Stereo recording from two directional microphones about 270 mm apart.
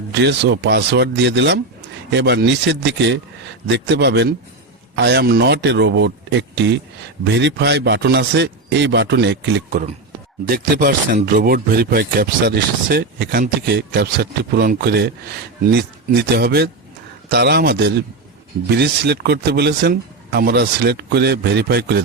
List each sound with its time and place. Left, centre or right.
0.1 s speech: right
16.3 s speech: right